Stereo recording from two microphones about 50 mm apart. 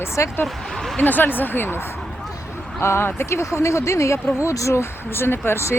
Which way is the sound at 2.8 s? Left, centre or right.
Left.